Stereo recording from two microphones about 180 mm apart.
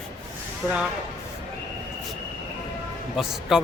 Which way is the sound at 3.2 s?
5° right (ahead or behind).